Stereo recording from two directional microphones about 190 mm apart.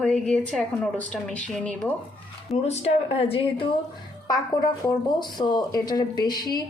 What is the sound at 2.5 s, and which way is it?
Speech, 35° left (ahead or behind).